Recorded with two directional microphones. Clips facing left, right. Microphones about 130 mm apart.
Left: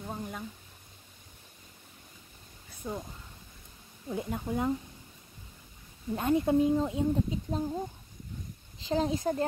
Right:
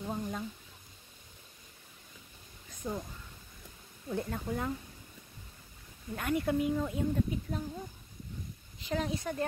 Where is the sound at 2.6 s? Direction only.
5° left (ahead or behind).